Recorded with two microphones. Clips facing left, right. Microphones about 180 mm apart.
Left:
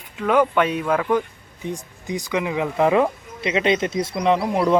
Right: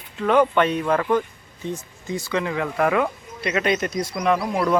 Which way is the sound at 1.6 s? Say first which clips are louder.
Even; 15° left (ahead or behind).